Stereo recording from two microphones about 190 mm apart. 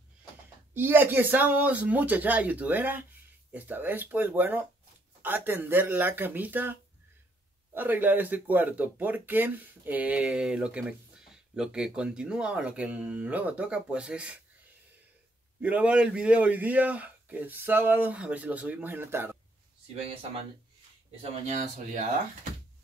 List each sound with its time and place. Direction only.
0.7 s speech: 10° right (ahead or behind)
15.6 s speech: 5° right (ahead or behind)
21.2 s speech: 40° right (ahead or behind)